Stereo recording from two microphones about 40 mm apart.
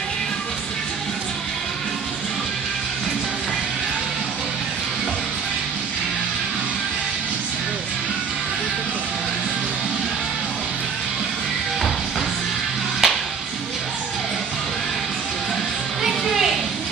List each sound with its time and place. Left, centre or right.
13.0 s music: centre
16.0 s music: centre